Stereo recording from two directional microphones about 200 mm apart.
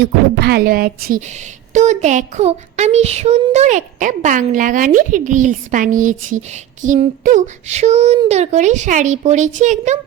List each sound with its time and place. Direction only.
0.0 s speech: 55° right (ahead or behind); by 10.0 s 35° right (ahead or behind)